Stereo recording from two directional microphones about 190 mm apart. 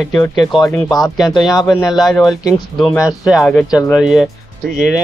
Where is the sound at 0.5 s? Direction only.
20° left (ahead or behind).